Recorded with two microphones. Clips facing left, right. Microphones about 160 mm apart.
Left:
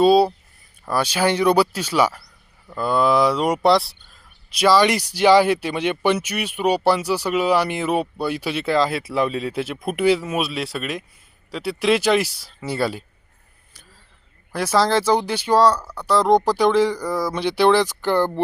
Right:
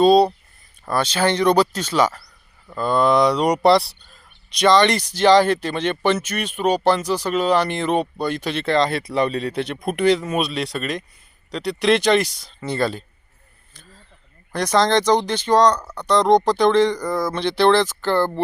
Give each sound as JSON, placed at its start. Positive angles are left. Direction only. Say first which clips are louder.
{"t": 0.0, "sound": "speech", "louder": "right 1 dB", "side_deg": 5}
{"t": 14.5, "sound": "speech", "louder": "right 1 dB", "side_deg": 5}